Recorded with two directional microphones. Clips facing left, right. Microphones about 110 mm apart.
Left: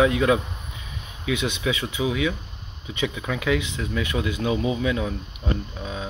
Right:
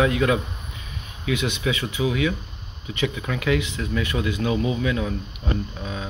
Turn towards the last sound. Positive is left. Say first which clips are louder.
# right 1 dB
turn(degrees=5)  # may be behind; listen again after turning